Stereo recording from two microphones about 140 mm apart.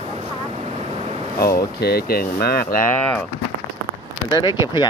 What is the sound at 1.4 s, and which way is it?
Speech, 90° left.